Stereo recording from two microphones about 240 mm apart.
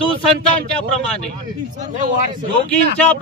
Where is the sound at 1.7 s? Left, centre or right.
Right.